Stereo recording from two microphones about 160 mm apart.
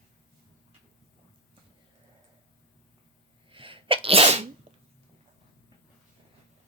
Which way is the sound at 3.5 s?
35° right (ahead or behind).